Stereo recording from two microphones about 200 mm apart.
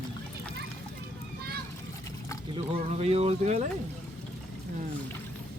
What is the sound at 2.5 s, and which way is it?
Speech, 30° right (ahead or behind).